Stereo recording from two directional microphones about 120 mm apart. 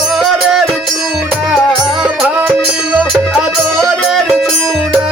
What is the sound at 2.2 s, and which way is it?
Music, 15° right (ahead or behind).